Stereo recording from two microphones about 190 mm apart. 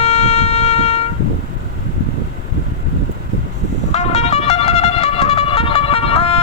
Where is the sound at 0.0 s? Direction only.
35° left (ahead or behind).